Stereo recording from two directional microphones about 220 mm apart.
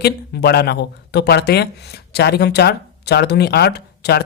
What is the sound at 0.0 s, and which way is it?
Speech, 50° left (ahead or behind).